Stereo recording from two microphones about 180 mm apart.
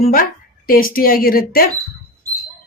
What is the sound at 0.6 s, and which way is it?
A woman's voice, 50° left (ahead or behind).